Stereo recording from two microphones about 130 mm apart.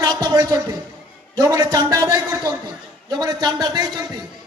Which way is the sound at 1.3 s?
30° right (ahead or behind).